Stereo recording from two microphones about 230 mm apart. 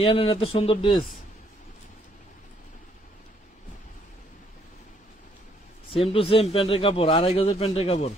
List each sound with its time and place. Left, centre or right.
0.0 s a man's voice: left
6.1 s a man's voice: left